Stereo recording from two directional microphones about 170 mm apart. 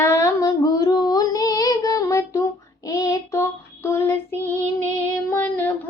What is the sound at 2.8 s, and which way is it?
Child singing, 20° left (ahead or behind).